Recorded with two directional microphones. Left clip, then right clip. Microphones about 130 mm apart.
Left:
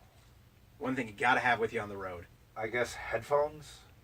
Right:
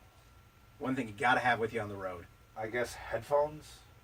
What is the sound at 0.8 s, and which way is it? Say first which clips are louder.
Speech: left 1 dB; 15° right (ahead or behind).